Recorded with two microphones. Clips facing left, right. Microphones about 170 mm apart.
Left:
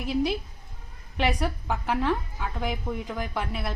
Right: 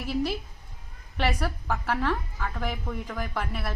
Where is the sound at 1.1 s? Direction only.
15° left (ahead or behind).